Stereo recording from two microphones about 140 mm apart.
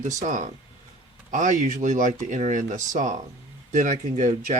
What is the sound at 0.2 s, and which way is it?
Speech, 65° right (ahead or behind).